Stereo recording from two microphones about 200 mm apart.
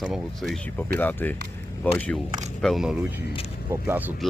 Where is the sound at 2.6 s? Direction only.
Centre (ahead or behind).